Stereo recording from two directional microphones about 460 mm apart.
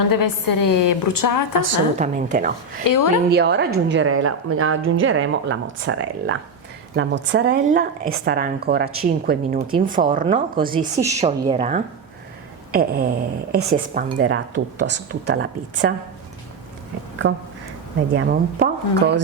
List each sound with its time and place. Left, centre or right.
0.1 s a woman's voice: left
1.6 s a woman's voice: centre
2.8 s a woman's voice: left
3.2 s a woman's voice: right
17.2 s a woman's voice: right